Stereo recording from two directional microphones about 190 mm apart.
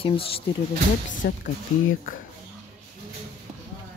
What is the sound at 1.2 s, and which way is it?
Speech, 55° left (ahead or behind).